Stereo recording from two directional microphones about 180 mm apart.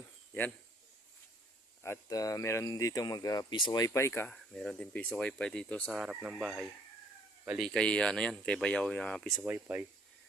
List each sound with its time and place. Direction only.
0.3 s speech: 10° left (ahead or behind)
1.8 s speech: 15° left (ahead or behind); by 7.7 s 5° right (ahead or behind)
7.7 s speech: 5° left (ahead or behind)
9.4 s speech: 10° right (ahead or behind)